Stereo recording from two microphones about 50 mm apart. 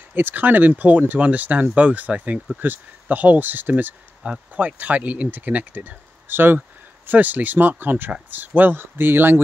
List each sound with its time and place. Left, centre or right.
0.1 s speech: right
2.6 s speech: right